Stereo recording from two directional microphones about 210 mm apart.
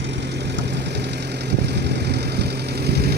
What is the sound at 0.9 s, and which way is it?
Vehicle, 55° right (ahead or behind).